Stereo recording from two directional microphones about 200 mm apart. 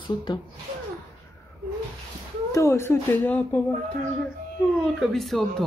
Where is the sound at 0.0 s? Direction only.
25° left (ahead or behind).